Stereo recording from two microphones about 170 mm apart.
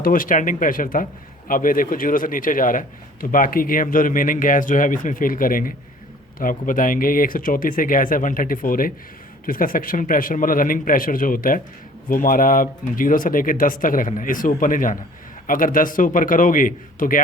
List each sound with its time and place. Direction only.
0.0 s a man's voice: 55° left (ahead or behind)